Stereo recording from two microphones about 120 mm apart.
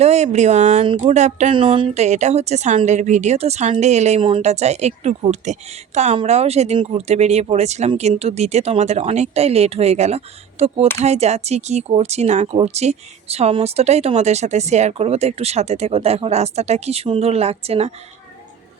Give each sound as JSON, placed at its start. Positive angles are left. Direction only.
{"t": 0.0, "sound": "a woman's voice", "side_deg": -70}
{"t": 1.5, "sound": "speech", "side_deg": -45}
{"t": 2.0, "sound": "a woman's voice", "side_deg": -75}
{"t": 2.8, "sound": "a woman's voice", "side_deg": -80}
{"t": 4.2, "sound": "speech", "side_deg": -45}
{"t": 4.4, "sound": "a woman's voice", "side_deg": -65}